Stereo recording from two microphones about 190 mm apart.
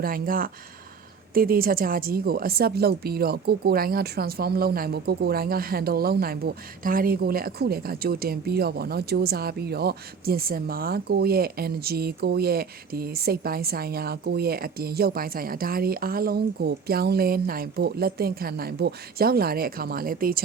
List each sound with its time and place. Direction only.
0.0 s a woman's voice: 50° right (ahead or behind)